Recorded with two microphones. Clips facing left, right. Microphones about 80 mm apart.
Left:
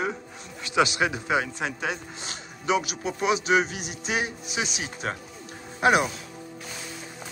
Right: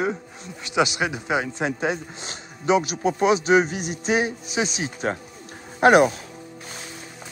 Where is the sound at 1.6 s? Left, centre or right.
Right.